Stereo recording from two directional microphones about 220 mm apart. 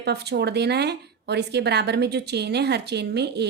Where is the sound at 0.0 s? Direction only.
50° right (ahead or behind).